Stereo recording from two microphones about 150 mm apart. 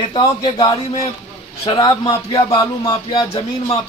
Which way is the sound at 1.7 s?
30° left (ahead or behind).